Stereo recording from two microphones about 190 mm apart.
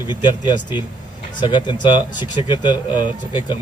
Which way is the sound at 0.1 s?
25° left (ahead or behind).